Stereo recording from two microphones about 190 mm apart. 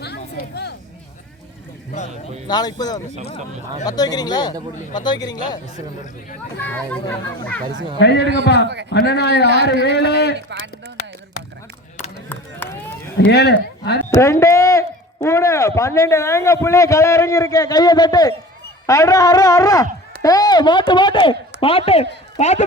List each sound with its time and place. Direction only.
0.0 s a sound: 60° left (ahead or behind)
2.5 s speech: 20° left (ahead or behind)
6.6 s a man's voice: 10° left (ahead or behind)
7.9 s a man's voice: 60° left (ahead or behind)
10.3 s a sound: 60° right (ahead or behind)
13.1 s speech: 60° left (ahead or behind)
14.2 s a man's voice: 15° left (ahead or behind); by 22.6 s 35° left (ahead or behind)